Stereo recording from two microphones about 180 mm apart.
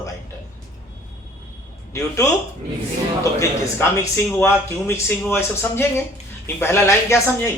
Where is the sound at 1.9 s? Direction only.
15° left (ahead or behind).